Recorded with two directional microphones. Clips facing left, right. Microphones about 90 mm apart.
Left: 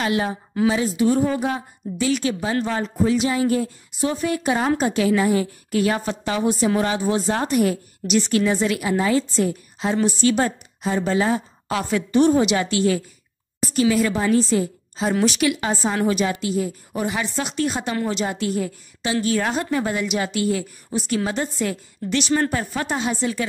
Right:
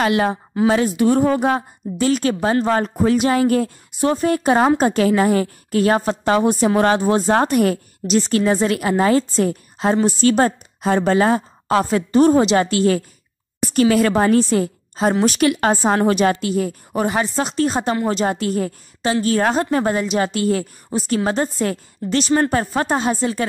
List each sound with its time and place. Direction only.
0.0 s a woman's voice: 70° right (ahead or behind)
0.7 s a woman's voice: 60° right (ahead or behind)
8.1 s a woman's voice: 40° right (ahead or behind)
13.6 s a woman's voice: 55° right (ahead or behind)